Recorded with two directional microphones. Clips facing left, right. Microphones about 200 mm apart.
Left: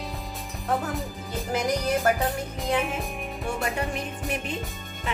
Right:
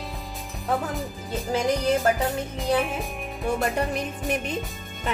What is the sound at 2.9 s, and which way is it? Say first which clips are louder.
Music: even; centre (ahead or behind).